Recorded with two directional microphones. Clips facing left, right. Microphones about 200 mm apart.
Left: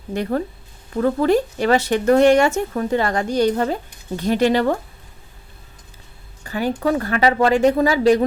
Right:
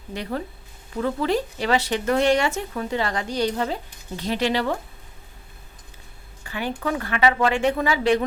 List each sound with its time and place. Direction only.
0.1 s speech: 50° left (ahead or behind)
6.4 s a woman's voice: 40° left (ahead or behind)